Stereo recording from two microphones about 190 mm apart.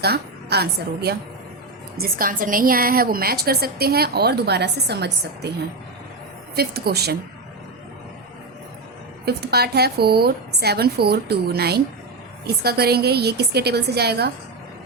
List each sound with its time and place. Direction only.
0.0 s a woman's voice: 55° right (ahead or behind)
6.6 s a woman's voice: 55° right (ahead or behind)
9.2 s a woman's voice: 55° right (ahead or behind)